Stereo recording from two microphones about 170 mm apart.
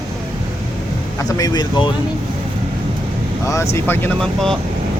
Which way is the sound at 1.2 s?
20° left (ahead or behind).